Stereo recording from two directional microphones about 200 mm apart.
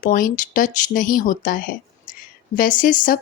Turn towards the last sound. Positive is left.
turn(degrees=45)  # may be behind; listen again after turning